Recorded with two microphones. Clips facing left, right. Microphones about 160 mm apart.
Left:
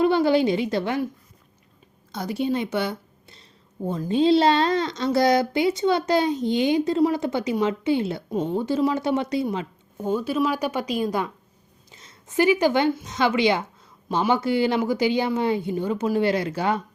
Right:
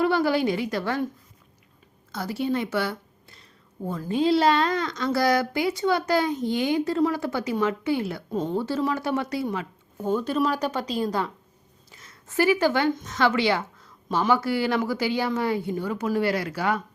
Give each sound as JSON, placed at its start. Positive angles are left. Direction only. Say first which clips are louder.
{"t": 0.0, "sound": "a woman's voice", "louder": "left 3 dB", "side_deg": 20}
{"t": 2.1, "sound": "a woman's voice", "louder": "left 2 dB", "side_deg": 20}
{"t": 8.3, "sound": "a woman's voice", "louder": "left 1 dB", "side_deg": 10}
{"t": 11.9, "sound": "a sound", "louder": "left 1 dB", "side_deg": 20}
{"t": 12.9, "sound": "a woman's voice", "louder": "even", "side_deg": 15}